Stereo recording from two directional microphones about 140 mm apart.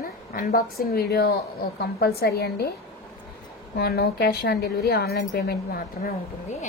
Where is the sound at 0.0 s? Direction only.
85° left.